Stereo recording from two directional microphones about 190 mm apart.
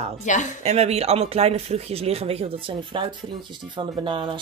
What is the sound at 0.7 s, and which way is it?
Speech, 35° right (ahead or behind).